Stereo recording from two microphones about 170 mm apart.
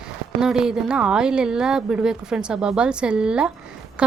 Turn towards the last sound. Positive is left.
turn(degrees=-5)  # may be behind; listen again after turning